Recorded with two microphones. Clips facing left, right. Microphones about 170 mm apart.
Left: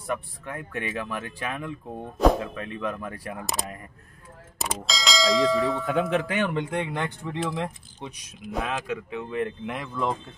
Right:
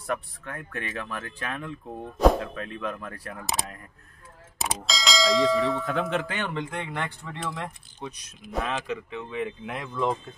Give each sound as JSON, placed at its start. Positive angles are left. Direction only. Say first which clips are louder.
{"t": 0.0, "sound": "speech", "louder": "even", "side_deg": 5}
{"t": 4.6, "sound": "speech", "louder": "even", "side_deg": 0}
{"t": 6.3, "sound": "speech", "louder": "left 5 dB", "side_deg": 20}
{"t": 8.5, "sound": "speech", "louder": "even", "side_deg": 0}